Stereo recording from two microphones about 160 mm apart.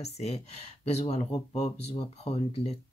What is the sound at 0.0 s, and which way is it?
Speech, 40° left (ahead or behind).